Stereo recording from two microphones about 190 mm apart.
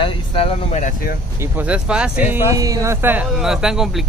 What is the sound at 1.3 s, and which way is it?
Speech, 10° right (ahead or behind).